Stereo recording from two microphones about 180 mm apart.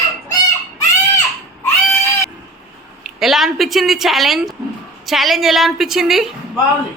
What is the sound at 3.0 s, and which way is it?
A woman's voice, centre (ahead or behind).